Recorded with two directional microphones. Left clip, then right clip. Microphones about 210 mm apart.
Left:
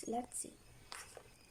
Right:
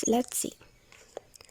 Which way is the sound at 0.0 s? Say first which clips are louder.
Right 14 dB; 50° right (ahead or behind).